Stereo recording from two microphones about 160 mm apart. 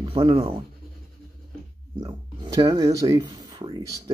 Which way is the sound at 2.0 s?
25° right (ahead or behind).